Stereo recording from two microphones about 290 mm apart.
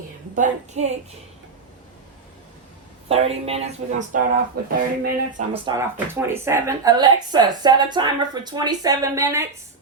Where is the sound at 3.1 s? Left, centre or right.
Right.